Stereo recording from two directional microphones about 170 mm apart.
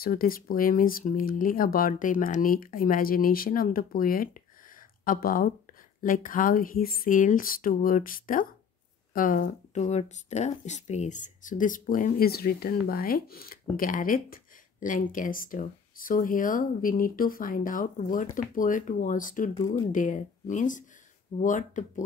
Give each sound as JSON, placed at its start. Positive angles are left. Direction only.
{"t": 0.0, "sound": "speech", "side_deg": 60}